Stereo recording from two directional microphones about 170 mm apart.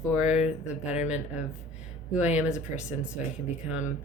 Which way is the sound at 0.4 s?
45° left (ahead or behind).